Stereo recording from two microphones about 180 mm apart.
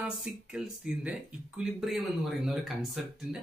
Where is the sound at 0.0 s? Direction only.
5° right (ahead or behind).